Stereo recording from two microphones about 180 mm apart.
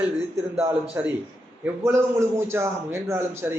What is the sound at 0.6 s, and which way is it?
A man's voice, 10° right (ahead or behind).